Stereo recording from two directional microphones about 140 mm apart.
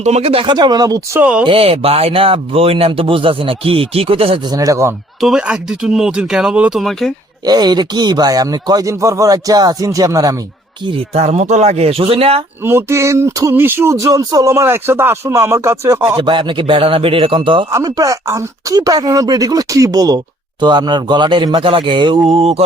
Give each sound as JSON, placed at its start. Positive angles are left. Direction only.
{"t": 0.0, "sound": "speech", "side_deg": -50}
{"t": 0.5, "sound": "speech", "side_deg": -30}
{"t": 1.2, "sound": "speech", "side_deg": -10}
{"t": 1.5, "sound": "speech", "side_deg": -45}
{"t": 4.5, "sound": "speech", "side_deg": -25}
{"t": 5.2, "sound": "speech", "side_deg": -5}
{"t": 7.4, "sound": "speech", "side_deg": -30}
{"t": 11.1, "sound": "speech", "side_deg": -50}
{"t": 12.6, "sound": "speech", "side_deg": -20}
{"t": 16.1, "sound": "speech", "side_deg": -35}
{"t": 17.7, "sound": "speech", "side_deg": -25}
{"t": 22.3, "sound": "speech", "side_deg": -45}